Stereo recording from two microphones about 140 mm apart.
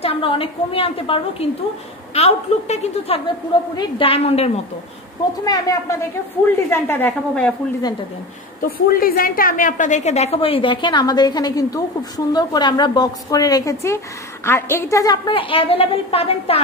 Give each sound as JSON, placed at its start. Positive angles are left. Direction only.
{"t": 0.0, "sound": "a woman's voice", "side_deg": 40}
{"t": 5.4, "sound": "a woman's voice", "side_deg": 25}
{"t": 8.6, "sound": "a woman's voice", "side_deg": 90}